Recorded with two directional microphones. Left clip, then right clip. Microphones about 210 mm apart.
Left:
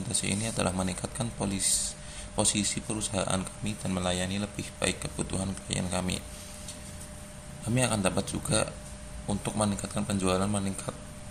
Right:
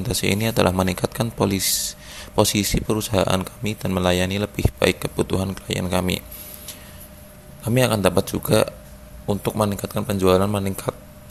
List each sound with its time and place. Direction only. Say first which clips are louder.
0.1 s speech: right 11 dB; 40° right (ahead or behind)
7.6 s speech: right 10 dB; 40° right (ahead or behind)